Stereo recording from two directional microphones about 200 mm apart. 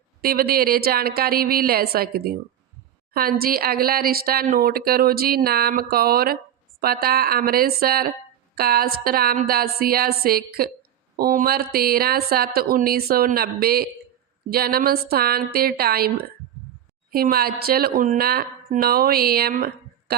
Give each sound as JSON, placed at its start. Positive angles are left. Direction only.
{"t": 0.2, "sound": "speech", "side_deg": -50}